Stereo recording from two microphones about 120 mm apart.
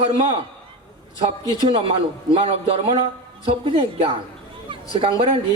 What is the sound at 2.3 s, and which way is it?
A man's voice, 50° right (ahead or behind).